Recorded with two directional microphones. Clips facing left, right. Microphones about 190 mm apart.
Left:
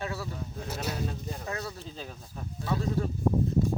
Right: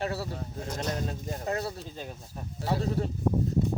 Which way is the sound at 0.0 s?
30° right (ahead or behind).